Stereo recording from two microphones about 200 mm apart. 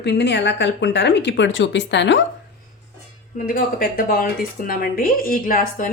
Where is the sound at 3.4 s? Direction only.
45° left (ahead or behind).